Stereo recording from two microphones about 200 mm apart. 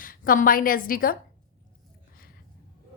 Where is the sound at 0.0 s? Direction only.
45° left (ahead or behind).